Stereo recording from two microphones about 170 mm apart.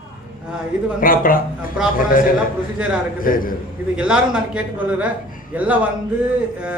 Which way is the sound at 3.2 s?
55° left (ahead or behind).